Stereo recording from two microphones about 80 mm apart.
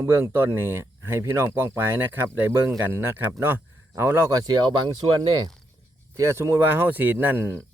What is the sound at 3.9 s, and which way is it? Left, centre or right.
Speech, right.